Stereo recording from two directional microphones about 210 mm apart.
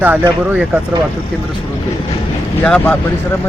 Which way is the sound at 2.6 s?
5° left (ahead or behind).